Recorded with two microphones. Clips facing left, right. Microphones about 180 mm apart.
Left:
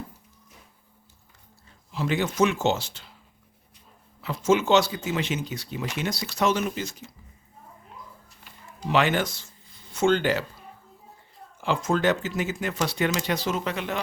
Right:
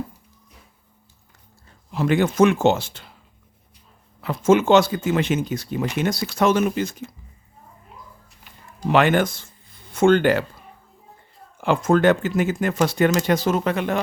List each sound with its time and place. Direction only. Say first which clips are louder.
1.9 s speech: right 7 dB; 55° right (ahead or behind)
4.2 s speech: right 5 dB; 55° right (ahead or behind)
8.9 s speech: right 6 dB; 55° right (ahead or behind)
11.5 s speech: right 7 dB; 55° right (ahead or behind)